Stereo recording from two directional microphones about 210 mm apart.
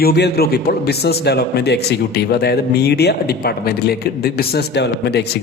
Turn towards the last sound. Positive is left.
turn(degrees=50)  # may be behind; listen again after turning